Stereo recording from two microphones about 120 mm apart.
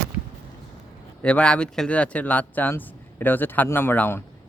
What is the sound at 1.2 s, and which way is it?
Speech, 10° left (ahead or behind).